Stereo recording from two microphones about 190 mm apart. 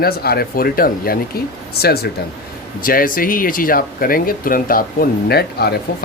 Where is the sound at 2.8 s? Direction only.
50° left (ahead or behind).